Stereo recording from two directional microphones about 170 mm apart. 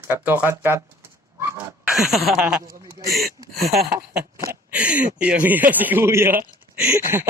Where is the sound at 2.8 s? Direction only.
20° right (ahead or behind).